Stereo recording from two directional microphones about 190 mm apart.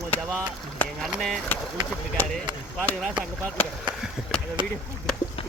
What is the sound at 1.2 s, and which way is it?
Speech, centre (ahead or behind).